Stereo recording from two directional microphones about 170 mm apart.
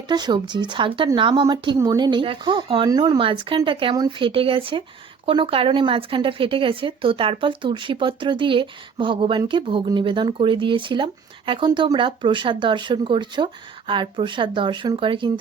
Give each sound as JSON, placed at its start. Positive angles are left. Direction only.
{"t": 0.1, "sound": "speech", "side_deg": -25}